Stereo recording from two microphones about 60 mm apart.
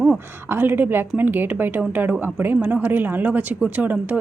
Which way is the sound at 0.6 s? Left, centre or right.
Right.